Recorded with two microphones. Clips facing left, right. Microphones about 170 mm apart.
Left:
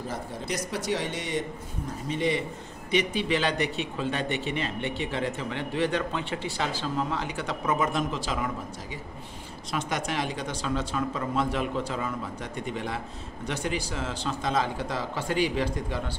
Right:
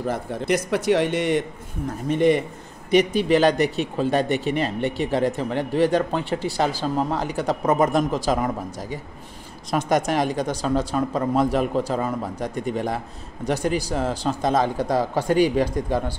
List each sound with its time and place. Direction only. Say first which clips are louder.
0.0 s a man's voice: right 8 dB; 60° right (ahead or behind); by 8.5 s 45° right (ahead or behind)
9.7 s speech: right 9 dB; 45° right (ahead or behind)